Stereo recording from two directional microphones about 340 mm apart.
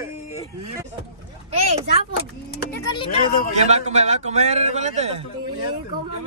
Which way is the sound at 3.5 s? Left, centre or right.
Centre.